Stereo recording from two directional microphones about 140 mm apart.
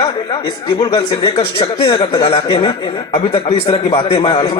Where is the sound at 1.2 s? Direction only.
40° left (ahead or behind).